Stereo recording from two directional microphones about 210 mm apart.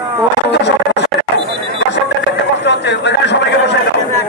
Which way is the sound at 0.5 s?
55° left (ahead or behind).